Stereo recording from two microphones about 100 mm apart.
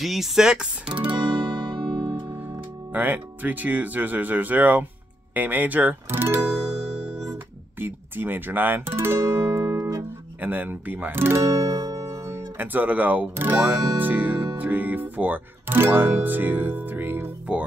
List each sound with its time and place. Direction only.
0.0 s speech: centre (ahead or behind)
1.7 s music: 55° right (ahead or behind)
2.3 s speech: 20° right (ahead or behind)
6.7 s music: 90° right
7.8 s speech: 20° right (ahead or behind)
10.4 s speech: 20° right (ahead or behind)